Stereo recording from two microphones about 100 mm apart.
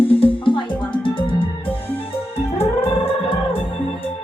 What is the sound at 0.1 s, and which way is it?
Music, 65° left (ahead or behind).